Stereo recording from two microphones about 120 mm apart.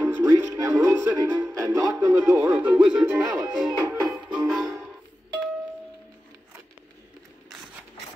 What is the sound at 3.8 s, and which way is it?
Music, 25° right (ahead or behind).